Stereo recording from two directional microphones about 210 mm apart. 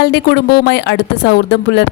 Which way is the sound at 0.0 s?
50° left (ahead or behind).